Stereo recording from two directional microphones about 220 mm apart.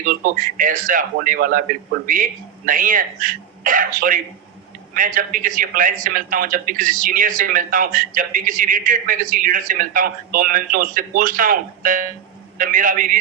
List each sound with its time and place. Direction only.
0.0 s a man's voice: 40° right (ahead or behind)